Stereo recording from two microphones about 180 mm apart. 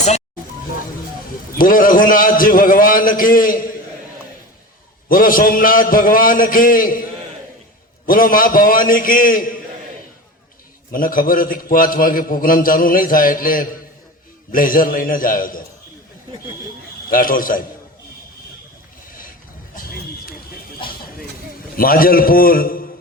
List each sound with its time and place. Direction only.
1.5 s a man's voice: 50° left (ahead or behind)
5.0 s a man's voice: 50° left (ahead or behind)
10.9 s a man's voice: 50° left (ahead or behind)
17.1 s a man's voice: 50° left (ahead or behind)
19.7 s a sound: 55° left (ahead or behind)
21.8 s a man's voice: 55° left (ahead or behind)